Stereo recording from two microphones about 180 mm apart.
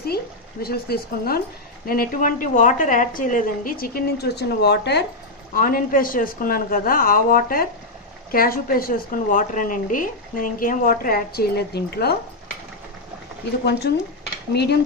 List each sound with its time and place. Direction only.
0.0 s a woman's voice: 60° left (ahead or behind)
5.5 s a woman's voice: 50° left (ahead or behind)
13.7 s speech: 65° left (ahead or behind)